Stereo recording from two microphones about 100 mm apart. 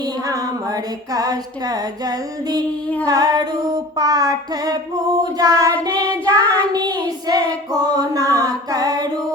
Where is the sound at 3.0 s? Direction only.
40° right (ahead or behind).